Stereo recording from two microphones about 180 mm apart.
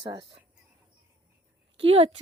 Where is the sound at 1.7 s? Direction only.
30° right (ahead or behind).